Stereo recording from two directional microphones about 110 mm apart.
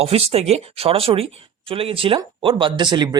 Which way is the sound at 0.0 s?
65° right (ahead or behind).